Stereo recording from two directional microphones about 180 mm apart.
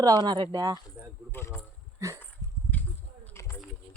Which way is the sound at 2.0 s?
15° right (ahead or behind).